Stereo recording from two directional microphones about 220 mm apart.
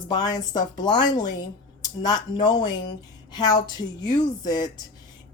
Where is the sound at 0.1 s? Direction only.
20° left (ahead or behind).